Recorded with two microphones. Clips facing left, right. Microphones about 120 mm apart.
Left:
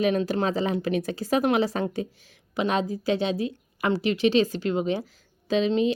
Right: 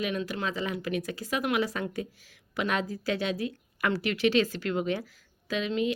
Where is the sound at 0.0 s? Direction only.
35° left (ahead or behind).